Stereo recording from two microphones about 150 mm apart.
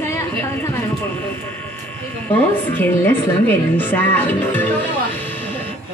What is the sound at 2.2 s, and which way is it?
A woman's voice, 10° left (ahead or behind).